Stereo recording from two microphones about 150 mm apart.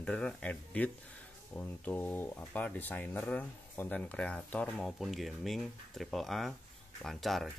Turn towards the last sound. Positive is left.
turn(degrees=0)  # may be behind; listen again after turning